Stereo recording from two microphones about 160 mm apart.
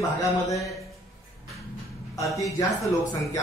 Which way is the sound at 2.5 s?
20° left (ahead or behind).